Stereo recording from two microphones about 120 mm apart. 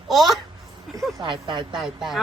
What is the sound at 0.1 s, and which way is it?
Speech, centre (ahead or behind).